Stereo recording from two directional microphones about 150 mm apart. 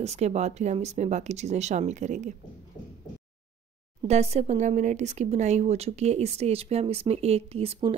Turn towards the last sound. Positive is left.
turn(degrees=-35)  # may be behind; listen again after turning